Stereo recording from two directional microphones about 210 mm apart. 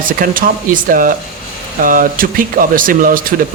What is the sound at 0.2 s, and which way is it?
Speech, 40° right (ahead or behind).